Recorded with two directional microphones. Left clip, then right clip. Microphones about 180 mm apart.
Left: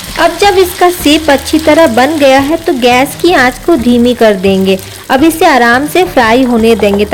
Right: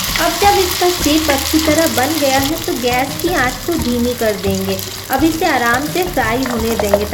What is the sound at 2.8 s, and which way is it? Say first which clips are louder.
Speech: left 9 dB; 60° left (ahead or behind).